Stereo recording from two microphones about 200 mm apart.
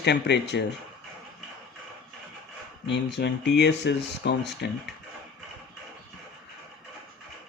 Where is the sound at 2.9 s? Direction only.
60° left (ahead or behind).